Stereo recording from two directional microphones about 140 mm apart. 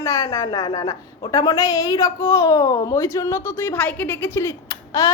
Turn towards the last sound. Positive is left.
turn(degrees=25)  # may be behind; listen again after turning